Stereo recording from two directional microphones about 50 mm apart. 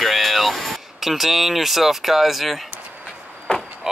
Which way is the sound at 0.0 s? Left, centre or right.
Centre.